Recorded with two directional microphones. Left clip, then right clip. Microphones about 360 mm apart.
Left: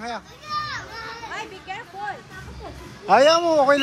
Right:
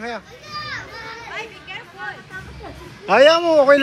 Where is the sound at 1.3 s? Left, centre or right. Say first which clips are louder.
Right 1 dB; left.